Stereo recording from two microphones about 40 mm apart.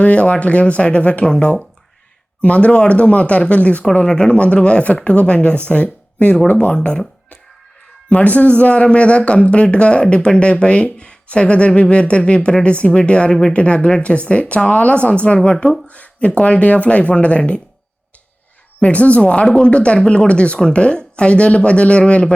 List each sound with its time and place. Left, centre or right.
0.0 s speech: left
2.4 s speech: left
6.7 s speech: left
8.1 s speech: left
18.8 s speech: left